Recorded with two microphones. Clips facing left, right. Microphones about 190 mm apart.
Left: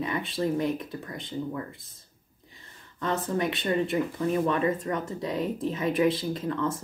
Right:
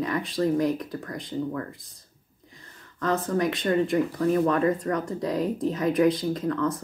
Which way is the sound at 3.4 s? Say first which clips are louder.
Right 3 dB; 5° left (ahead or behind).